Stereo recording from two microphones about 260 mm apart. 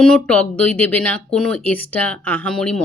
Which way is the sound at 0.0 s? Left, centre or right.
Centre.